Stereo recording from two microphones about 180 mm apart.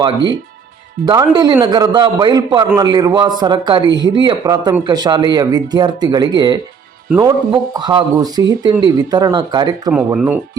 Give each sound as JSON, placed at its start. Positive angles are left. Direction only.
{"t": 1.0, "sound": "a man's voice", "side_deg": -20}
{"t": 9.9, "sound": "speech", "side_deg": -10}